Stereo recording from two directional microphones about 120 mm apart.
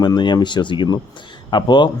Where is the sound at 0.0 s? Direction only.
35° left (ahead or behind).